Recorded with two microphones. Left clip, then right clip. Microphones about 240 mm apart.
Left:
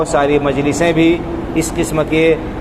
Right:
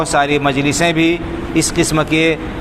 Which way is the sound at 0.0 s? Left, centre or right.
Right.